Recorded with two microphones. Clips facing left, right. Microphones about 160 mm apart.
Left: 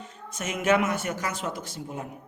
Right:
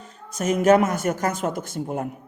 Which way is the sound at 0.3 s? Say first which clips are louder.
Right 7 dB; 40° right (ahead or behind).